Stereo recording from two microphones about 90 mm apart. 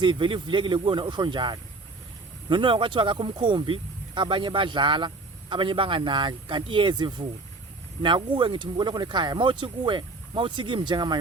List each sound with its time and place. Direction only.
0.0 s speech: 65° right (ahead or behind)